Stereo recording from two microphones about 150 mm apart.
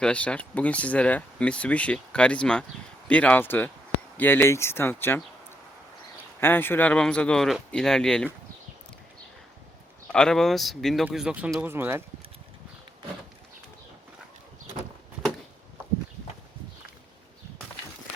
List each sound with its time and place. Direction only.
0.0 s speech: 5° left (ahead or behind)
6.4 s speech: 15° left (ahead or behind)
10.1 s speech: 5° left (ahead or behind); by 12.0 s 15° right (ahead or behind)